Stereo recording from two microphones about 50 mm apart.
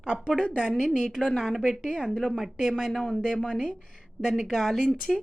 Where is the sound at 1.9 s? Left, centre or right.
Centre.